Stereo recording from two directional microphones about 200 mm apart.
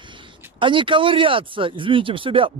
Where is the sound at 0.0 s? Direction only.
25° right (ahead or behind).